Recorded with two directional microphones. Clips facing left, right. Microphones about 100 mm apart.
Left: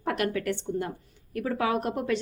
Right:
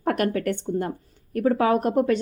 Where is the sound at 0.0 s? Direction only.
45° right (ahead or behind).